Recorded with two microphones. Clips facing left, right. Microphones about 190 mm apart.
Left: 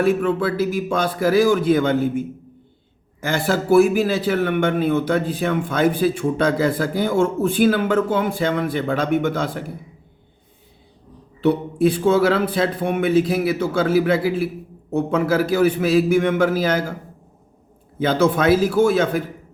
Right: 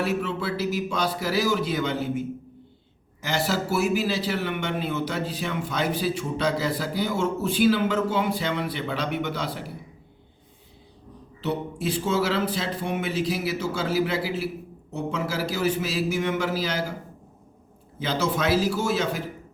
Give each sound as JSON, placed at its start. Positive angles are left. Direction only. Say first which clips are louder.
{"t": 0.0, "sound": "a man's voice", "louder": "left 8 dB", "side_deg": 50}
{"t": 11.3, "sound": "a man's voice", "louder": "left 10 dB", "side_deg": 55}
{"t": 18.0, "sound": "a man's voice", "louder": "left 8 dB", "side_deg": 55}